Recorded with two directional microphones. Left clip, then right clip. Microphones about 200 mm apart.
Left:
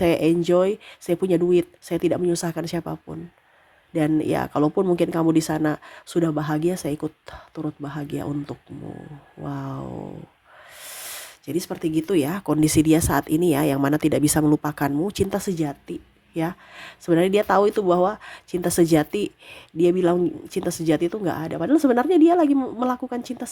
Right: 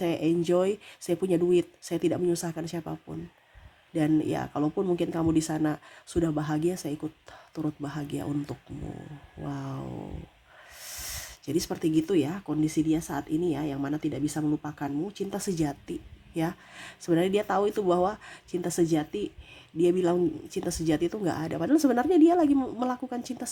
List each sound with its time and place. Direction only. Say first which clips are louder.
0.0 s a woman's voice: left 8 dB; 25° left (ahead or behind)
7.5 s a woman's voice: left 3 dB; 10° left (ahead or behind)
11.1 s speech: left 3 dB; 10° left (ahead or behind); by 15.4 s 35° left (ahead or behind)
15.4 s a woman's voice: left 4 dB; 15° left (ahead or behind)
19.7 s a woman's voice: left 5 dB; 20° left (ahead or behind)